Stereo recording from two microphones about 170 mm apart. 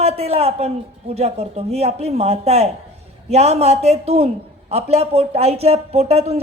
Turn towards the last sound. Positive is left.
turn(degrees=-40)  # may be behind; listen again after turning